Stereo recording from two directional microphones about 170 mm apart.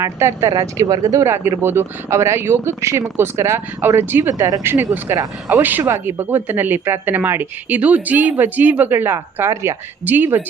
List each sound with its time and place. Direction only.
0.0 s speech: 15° right (ahead or behind)